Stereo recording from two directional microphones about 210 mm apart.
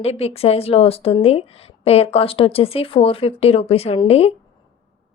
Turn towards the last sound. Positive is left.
turn(degrees=30)  # may be behind; listen again after turning